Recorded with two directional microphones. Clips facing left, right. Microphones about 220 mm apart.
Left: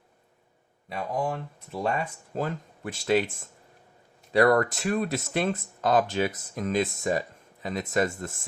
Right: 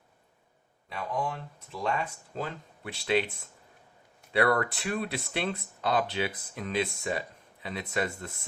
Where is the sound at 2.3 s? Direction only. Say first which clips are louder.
Left 9 dB; 45° left (ahead or behind).